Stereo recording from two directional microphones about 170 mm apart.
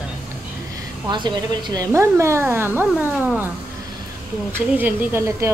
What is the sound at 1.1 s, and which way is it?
Speech, 25° right (ahead or behind).